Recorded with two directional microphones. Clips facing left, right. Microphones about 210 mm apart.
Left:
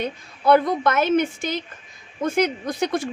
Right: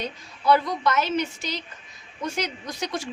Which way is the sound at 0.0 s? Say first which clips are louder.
Left 4 dB; 55° left (ahead or behind).